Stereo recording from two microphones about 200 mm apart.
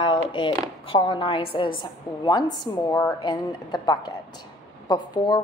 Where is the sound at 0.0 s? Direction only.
25° left (ahead or behind).